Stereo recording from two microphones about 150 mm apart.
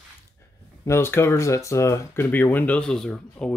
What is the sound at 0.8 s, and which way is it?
Speech, 15° left (ahead or behind).